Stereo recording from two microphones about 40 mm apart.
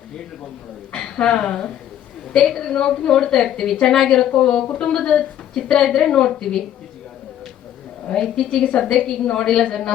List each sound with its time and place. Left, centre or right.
0.9 s a woman's voice: left
4.1 s a woman's voice: left
8.1 s a woman's voice: centre